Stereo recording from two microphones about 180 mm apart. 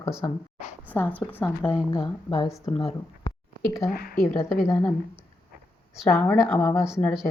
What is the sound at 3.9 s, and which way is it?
Speech, 55° left (ahead or behind).